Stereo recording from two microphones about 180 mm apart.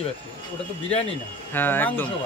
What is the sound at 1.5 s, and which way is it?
Speech, 10° left (ahead or behind).